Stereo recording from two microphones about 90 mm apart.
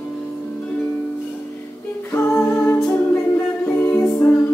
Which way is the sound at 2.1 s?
30° left (ahead or behind).